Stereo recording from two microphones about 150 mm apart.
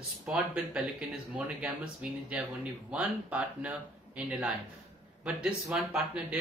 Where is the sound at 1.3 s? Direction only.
10° right (ahead or behind).